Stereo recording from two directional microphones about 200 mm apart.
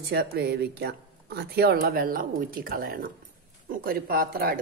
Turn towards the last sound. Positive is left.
turn(degrees=-45)  # may be behind; listen again after turning